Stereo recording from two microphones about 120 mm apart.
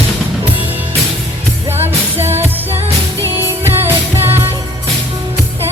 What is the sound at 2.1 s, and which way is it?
Music, 20° right (ahead or behind).